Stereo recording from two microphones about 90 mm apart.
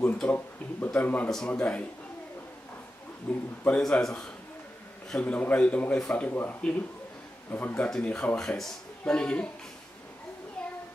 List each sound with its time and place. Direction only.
0.0 s speech: 20° left (ahead or behind)
3.3 s speech: 10° left (ahead or behind)
5.2 s speech: 20° left (ahead or behind)